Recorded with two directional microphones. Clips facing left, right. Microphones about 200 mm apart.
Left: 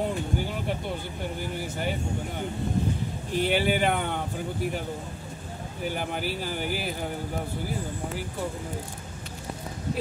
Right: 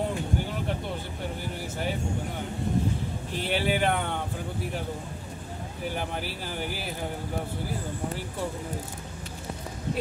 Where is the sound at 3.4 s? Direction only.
Centre (ahead or behind).